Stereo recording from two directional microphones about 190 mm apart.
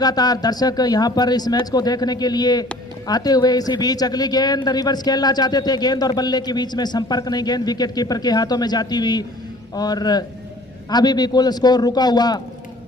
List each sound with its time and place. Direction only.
0.0 s speech: 20° left (ahead or behind)